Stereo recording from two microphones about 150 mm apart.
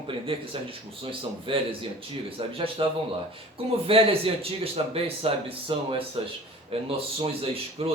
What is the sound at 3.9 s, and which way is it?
Speech, 40° right (ahead or behind).